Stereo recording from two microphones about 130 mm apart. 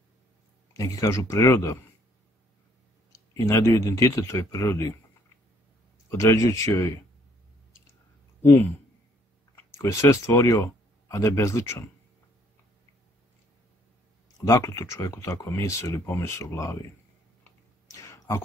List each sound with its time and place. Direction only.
0.7 s speech: 25° left (ahead or behind)
3.3 s speech: 25° left (ahead or behind)
6.0 s speech: 25° left (ahead or behind)
8.4 s speech: 20° left (ahead or behind)
9.8 s speech: 25° left (ahead or behind)
14.4 s speech: 20° left (ahead or behind)
17.4 s clicking: 25° left (ahead or behind)